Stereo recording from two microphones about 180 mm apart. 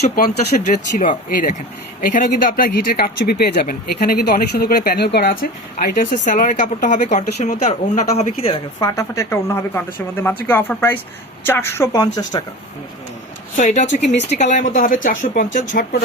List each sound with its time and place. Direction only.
0.3 s speech: 40° left (ahead or behind)
8.8 s a woman's voice: 15° left (ahead or behind)
13.6 s speech: 45° left (ahead or behind)